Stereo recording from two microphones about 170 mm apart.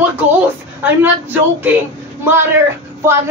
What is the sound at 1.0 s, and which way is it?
Speech, 10° right (ahead or behind).